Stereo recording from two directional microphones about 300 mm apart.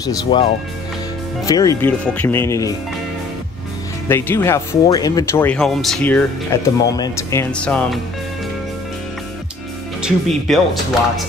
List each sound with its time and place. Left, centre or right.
0.0 s speech: centre
4.1 s speech: centre
10.0 s speech: centre